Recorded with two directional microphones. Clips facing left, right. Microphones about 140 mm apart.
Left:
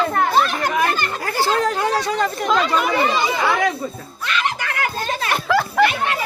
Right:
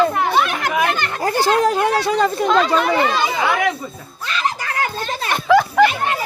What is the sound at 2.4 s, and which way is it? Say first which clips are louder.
Speech: right 1 dB; centre (ahead or behind).